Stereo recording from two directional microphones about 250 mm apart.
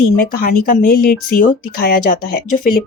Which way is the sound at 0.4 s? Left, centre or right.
Left.